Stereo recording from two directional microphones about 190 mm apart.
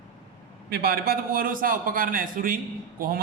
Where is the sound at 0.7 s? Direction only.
55° right (ahead or behind).